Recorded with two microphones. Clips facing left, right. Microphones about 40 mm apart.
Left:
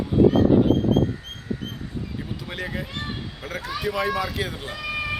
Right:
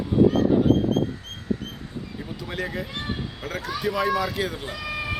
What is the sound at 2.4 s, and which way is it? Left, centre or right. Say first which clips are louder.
Speech: right 4 dB; centre.